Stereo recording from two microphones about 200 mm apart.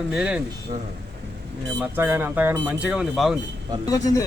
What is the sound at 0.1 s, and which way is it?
Speech, 5° right (ahead or behind).